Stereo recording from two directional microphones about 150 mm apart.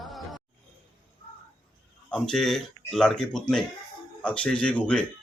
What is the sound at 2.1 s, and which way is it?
Speech, 5° left (ahead or behind).